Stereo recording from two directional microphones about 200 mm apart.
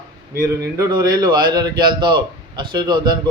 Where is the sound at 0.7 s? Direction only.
15° right (ahead or behind).